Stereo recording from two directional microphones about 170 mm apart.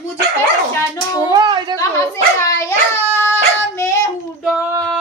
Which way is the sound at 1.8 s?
20° left (ahead or behind).